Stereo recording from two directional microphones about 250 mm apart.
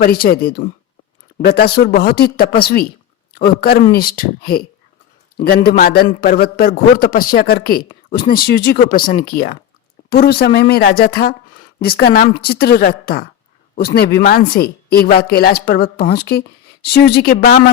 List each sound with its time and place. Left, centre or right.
0.0 s a woman's voice: left
5.6 s a woman's voice: left